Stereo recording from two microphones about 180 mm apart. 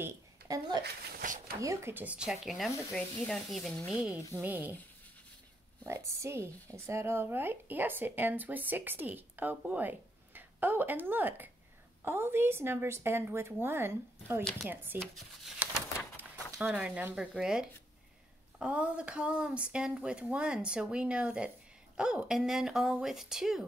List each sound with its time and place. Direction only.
0.0 s a woman's voice: 20° right (ahead or behind)
0.8 s speech: 45° right (ahead or behind)
1.6 s speech: 15° right (ahead or behind); by 4.0 s 10° left (ahead or behind)
4.4 s speech: 10° right (ahead or behind)
5.9 s speech: 15° right (ahead or behind)
15.4 s a sound: 5° right (ahead or behind)
16.5 s speech: 5° right (ahead or behind)